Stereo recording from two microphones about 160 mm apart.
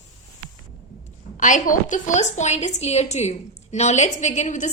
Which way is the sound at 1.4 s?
50° left (ahead or behind).